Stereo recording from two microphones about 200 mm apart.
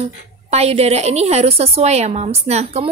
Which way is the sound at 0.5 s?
30° right (ahead or behind).